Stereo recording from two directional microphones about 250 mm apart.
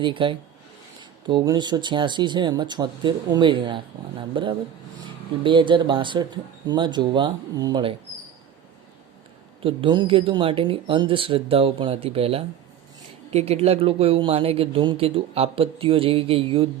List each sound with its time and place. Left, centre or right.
0.0 s speech: centre
9.6 s speech: centre